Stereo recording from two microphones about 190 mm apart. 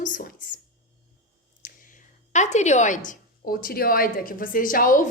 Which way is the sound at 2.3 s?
40° left (ahead or behind).